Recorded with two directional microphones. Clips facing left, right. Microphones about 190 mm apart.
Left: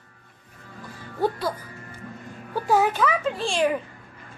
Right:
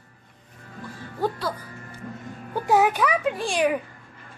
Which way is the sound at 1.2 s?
15° left (ahead or behind).